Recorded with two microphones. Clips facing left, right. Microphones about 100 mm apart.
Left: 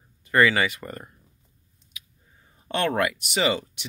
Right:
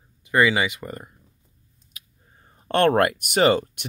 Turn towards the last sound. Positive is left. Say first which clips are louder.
# right 6 dB
turn(degrees=-50)  # may be behind; listen again after turning